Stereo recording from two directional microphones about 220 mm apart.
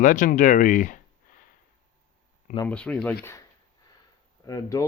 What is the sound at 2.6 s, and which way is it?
Speech, 5° left (ahead or behind).